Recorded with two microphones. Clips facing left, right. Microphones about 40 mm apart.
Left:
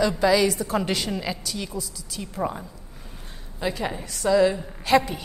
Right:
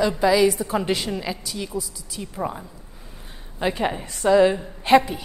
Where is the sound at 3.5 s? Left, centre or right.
Right.